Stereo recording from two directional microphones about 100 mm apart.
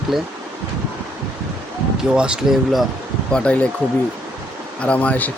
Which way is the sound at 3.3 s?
10° left (ahead or behind).